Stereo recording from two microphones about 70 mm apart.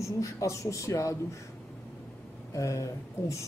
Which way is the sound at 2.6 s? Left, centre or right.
Left.